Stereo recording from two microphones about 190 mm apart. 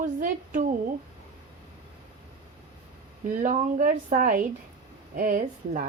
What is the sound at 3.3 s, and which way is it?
A woman's voice, 45° right (ahead or behind).